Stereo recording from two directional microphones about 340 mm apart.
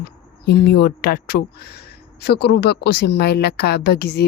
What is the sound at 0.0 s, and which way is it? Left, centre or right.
Speech, left.